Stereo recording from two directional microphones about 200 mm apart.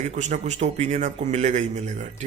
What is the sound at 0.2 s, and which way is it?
Speech, 35° right (ahead or behind).